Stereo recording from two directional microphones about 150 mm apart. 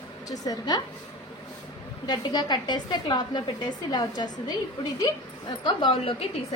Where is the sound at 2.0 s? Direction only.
30° left (ahead or behind).